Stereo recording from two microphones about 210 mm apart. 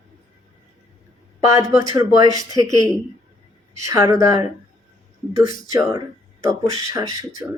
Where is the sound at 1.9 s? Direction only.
20° right (ahead or behind).